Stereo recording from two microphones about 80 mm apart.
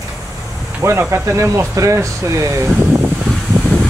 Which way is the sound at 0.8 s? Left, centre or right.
Right.